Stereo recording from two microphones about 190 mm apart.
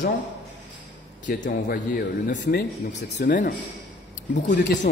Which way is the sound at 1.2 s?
50° left (ahead or behind).